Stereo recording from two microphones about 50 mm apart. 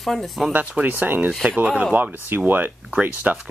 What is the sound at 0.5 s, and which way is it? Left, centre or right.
Speech, right.